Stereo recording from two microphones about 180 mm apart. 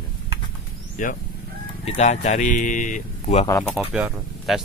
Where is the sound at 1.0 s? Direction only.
45° left (ahead or behind).